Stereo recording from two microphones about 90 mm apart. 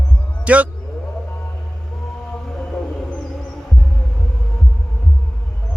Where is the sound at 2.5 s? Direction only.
5° left (ahead or behind).